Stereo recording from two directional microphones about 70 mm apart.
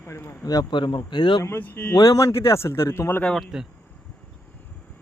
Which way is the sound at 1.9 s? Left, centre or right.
Left.